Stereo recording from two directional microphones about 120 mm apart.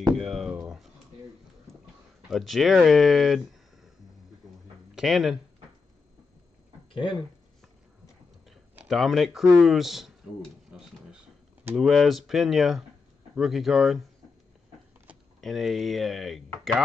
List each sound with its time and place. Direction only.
0.1 s a sound: 5° right (ahead or behind)
2.2 s speech: centre (ahead or behind)
4.9 s speech: centre (ahead or behind)
6.9 s speech: 45° left (ahead or behind)
8.8 s speech: centre (ahead or behind)
10.7 s a sound: 5° right (ahead or behind)
11.7 s speech: centre (ahead or behind)
15.4 s speech: centre (ahead or behind)